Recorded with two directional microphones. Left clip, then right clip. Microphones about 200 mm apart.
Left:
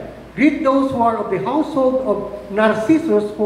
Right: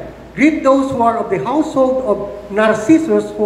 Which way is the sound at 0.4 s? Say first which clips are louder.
Right 3 dB; 55° right (ahead or behind).